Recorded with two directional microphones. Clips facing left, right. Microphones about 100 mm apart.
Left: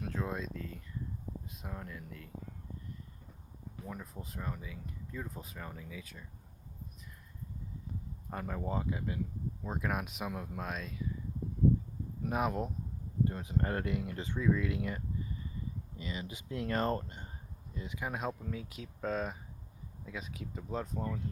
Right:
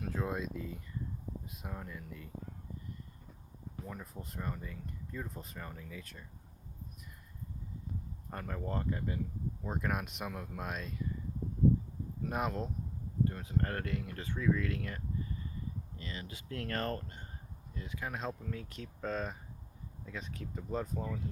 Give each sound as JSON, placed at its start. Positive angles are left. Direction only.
{"t": 0.0, "sound": "speech", "side_deg": -5}
{"t": 3.8, "sound": "speech", "side_deg": 0}
{"t": 8.3, "sound": "speech", "side_deg": 5}
{"t": 12.3, "sound": "speech", "side_deg": 5}